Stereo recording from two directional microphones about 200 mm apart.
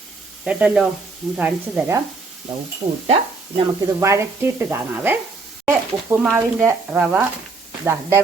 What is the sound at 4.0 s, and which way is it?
A woman's voice, 15° right (ahead or behind).